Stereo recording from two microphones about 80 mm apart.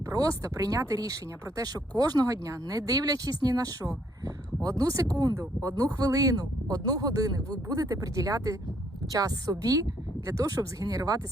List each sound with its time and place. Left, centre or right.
0.0 s speech: right